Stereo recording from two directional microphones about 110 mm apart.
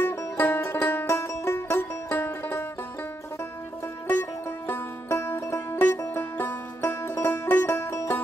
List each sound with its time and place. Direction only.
0.0 s music: 20° left (ahead or behind)
4.1 s music: 20° left (ahead or behind)